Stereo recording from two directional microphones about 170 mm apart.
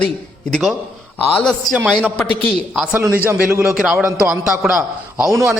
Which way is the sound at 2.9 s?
15° right (ahead or behind).